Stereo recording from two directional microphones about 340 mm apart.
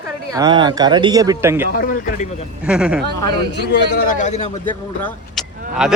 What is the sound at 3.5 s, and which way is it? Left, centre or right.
Speech, left.